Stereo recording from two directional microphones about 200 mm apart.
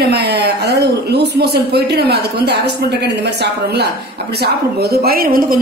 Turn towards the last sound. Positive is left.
turn(degrees=-45)  # may be behind; listen again after turning